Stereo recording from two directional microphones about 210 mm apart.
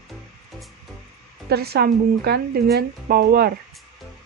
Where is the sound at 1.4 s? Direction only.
50° right (ahead or behind).